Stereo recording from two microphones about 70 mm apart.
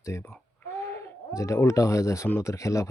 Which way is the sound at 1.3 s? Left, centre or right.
Left.